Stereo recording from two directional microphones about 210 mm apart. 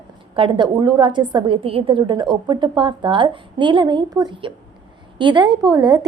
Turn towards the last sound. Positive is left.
turn(degrees=-20)  # may be behind; listen again after turning